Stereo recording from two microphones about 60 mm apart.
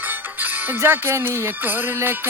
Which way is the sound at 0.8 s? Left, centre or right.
Right.